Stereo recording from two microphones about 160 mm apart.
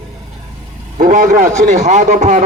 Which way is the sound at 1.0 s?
55° right (ahead or behind).